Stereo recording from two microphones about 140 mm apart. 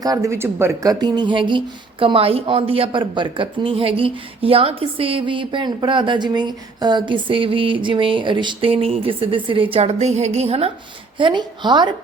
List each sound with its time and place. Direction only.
0.0 s a woman's voice: 25° right (ahead or behind); by 10.7 s 50° right (ahead or behind)
11.2 s a woman's voice: 35° right (ahead or behind)